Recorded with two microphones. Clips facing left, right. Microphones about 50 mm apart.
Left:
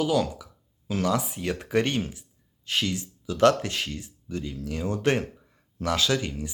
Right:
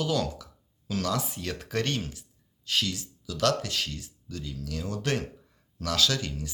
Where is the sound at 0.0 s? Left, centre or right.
Centre.